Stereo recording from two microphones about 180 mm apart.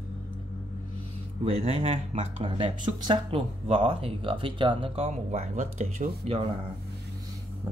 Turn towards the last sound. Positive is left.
turn(degrees=-40)  # may be behind; listen again after turning